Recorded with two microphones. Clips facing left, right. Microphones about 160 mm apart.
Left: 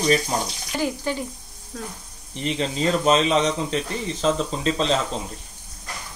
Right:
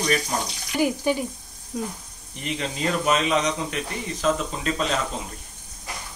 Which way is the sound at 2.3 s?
30° left (ahead or behind).